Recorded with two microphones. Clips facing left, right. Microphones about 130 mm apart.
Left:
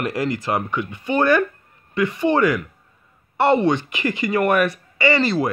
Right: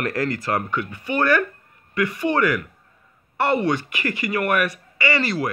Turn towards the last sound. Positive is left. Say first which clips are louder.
# left 4 dB
turn(degrees=25)  # may be behind; listen again after turning